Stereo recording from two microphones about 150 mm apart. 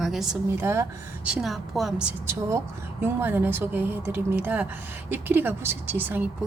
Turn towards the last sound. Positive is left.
turn(degrees=-10)  # may be behind; listen again after turning